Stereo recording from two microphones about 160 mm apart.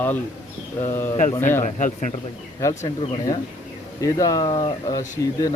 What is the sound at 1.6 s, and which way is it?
Speech, 50° left (ahead or behind).